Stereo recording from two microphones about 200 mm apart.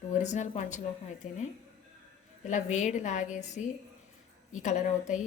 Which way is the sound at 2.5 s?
35° left (ahead or behind).